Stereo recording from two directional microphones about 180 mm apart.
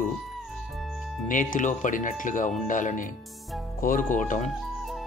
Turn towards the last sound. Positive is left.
turn(degrees=45)  # may be behind; listen again after turning